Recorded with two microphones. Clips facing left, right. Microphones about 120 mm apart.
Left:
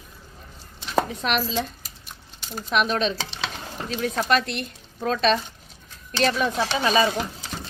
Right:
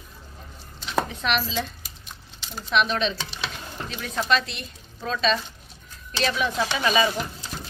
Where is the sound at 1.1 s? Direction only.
40° left (ahead or behind).